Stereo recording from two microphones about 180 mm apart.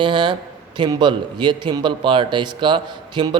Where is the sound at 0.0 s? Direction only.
25° right (ahead or behind).